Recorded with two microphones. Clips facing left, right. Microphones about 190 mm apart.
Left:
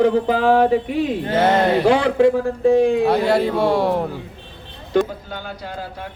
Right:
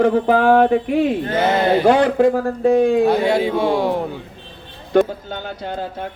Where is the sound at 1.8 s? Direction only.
45° right (ahead or behind).